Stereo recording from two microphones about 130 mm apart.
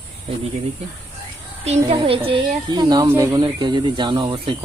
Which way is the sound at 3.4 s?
35° right (ahead or behind).